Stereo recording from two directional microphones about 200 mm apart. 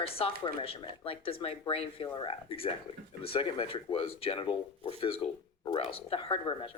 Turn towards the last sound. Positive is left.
turn(degrees=25)  # may be behind; listen again after turning